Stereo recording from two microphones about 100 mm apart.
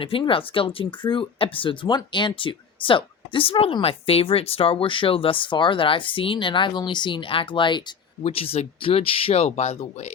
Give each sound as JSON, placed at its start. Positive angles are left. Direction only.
{"t": 0.0, "sound": "speech", "side_deg": 65}
{"t": 8.2, "sound": "speech", "side_deg": 75}